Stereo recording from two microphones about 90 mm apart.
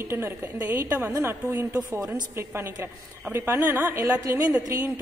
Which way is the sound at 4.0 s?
40° right (ahead or behind).